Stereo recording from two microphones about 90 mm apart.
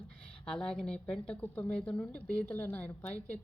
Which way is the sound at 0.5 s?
10° left (ahead or behind).